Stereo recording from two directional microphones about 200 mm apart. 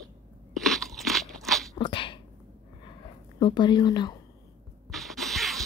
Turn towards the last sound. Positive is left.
turn(degrees=0)  # may be behind; listen again after turning